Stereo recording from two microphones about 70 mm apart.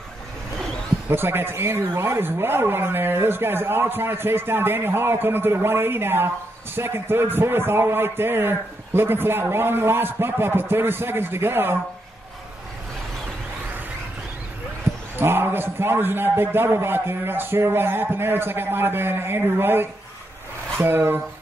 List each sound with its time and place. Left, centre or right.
1.1 s speech: right
15.1 s speech: right